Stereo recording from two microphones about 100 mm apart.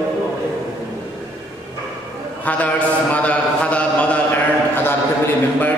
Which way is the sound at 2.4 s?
15° left (ahead or behind).